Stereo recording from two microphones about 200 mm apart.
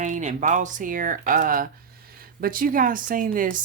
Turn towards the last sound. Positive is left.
turn(degrees=-40)  # may be behind; listen again after turning